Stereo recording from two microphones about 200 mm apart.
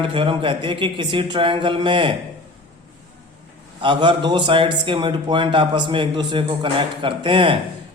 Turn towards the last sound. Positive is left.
turn(degrees=-25)  # may be behind; listen again after turning